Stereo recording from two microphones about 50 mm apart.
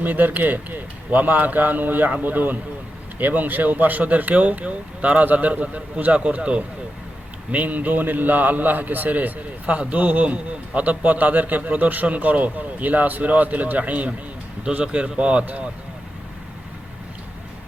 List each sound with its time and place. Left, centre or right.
0.0 s a man's voice: right